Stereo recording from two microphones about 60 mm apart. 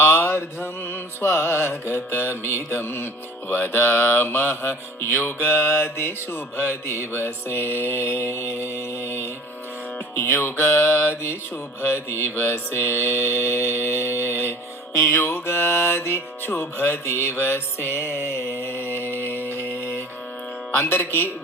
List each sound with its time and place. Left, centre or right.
0.0 s mantra: left
20.7 s mantra: left